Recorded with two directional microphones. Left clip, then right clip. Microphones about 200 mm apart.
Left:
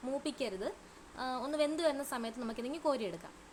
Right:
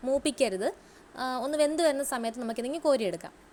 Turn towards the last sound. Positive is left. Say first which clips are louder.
# right 8 dB
turn(degrees=-20)  # may be behind; listen again after turning